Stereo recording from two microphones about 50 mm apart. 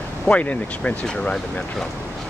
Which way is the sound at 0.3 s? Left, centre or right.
Left.